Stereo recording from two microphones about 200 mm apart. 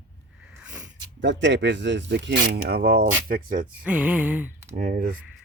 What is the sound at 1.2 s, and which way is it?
Speech, 60° right (ahead or behind).